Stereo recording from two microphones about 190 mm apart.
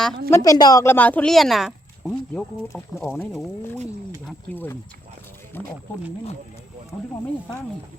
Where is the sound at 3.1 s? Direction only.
Centre (ahead or behind).